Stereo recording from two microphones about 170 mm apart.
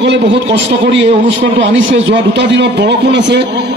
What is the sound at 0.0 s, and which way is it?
A man's voice, 90° right.